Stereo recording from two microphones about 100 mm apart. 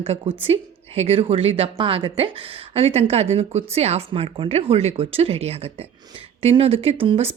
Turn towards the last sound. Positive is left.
turn(degrees=-75)  # may be behind; listen again after turning